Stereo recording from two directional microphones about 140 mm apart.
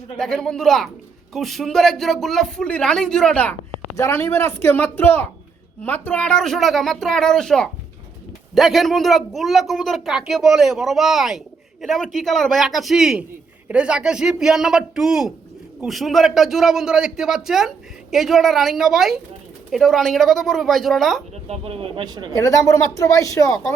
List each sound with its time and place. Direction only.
0.2 s speech: 5° left (ahead or behind)
3.9 s a woman's voice: 20° left (ahead or behind); by 21.2 s centre (ahead or behind)
21.4 s speech: 45° right (ahead or behind)
22.0 s a woman's voice: 30° right (ahead or behind)
22.4 s speech: 20° left (ahead or behind)